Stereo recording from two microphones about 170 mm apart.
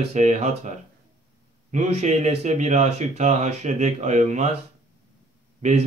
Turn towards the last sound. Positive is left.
turn(degrees=-45)  # may be behind; listen again after turning